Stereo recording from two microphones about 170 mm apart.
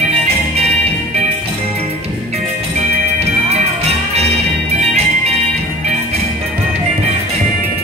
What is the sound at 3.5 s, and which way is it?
Music, 40° right (ahead or behind).